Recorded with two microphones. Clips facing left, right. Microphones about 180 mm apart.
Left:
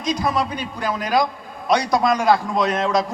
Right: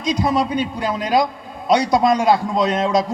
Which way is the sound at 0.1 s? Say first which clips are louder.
Right 3 dB; 20° right (ahead or behind).